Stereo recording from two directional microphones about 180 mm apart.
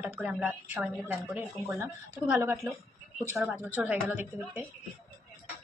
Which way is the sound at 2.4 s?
15° right (ahead or behind).